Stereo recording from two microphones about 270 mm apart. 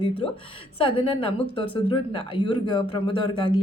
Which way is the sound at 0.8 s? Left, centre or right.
Centre.